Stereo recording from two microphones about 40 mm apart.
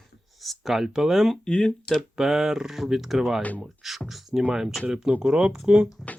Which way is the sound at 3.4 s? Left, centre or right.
Left.